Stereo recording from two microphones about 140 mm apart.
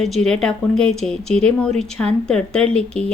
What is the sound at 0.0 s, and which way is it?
A woman's voice, 5° left (ahead or behind).